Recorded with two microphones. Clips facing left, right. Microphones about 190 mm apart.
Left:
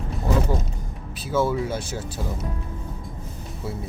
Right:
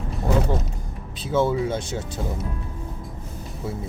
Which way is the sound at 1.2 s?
20° right (ahead or behind).